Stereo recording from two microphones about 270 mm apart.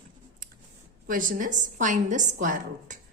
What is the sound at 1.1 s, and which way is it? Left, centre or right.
A woman's voice, right.